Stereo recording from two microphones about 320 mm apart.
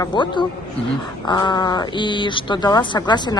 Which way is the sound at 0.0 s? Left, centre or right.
Centre.